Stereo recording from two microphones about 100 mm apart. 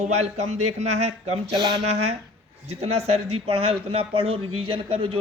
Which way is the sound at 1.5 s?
45° right (ahead or behind).